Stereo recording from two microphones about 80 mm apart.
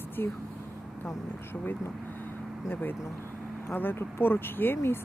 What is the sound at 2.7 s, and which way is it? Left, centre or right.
Speech, left.